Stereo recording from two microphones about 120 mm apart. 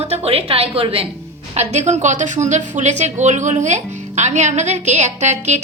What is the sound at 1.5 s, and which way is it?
A woman's voice, 70° right (ahead or behind).